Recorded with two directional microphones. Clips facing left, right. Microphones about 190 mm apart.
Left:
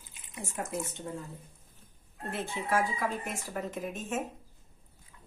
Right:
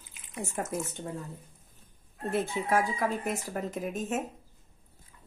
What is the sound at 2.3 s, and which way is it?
Speech, 40° right (ahead or behind).